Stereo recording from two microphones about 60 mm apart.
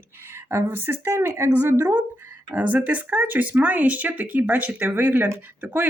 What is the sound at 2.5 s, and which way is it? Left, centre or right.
Speech, right.